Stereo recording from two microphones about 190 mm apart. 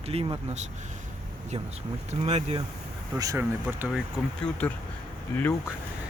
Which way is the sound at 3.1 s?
15° right (ahead or behind).